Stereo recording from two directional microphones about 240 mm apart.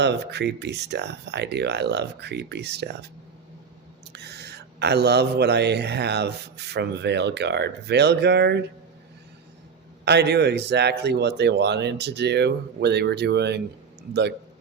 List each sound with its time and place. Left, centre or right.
0.0 s speech: right
4.1 s speech: right
10.1 s speech: right